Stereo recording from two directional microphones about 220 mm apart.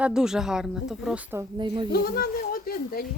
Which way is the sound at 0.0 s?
5° right (ahead or behind).